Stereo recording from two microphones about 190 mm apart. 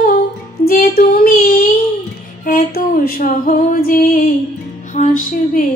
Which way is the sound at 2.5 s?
50° left (ahead or behind).